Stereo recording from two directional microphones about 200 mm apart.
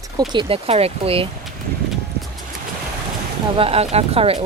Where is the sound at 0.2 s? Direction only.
25° right (ahead or behind).